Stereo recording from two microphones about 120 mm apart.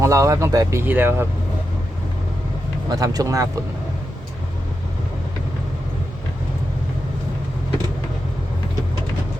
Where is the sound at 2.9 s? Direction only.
30° right (ahead or behind).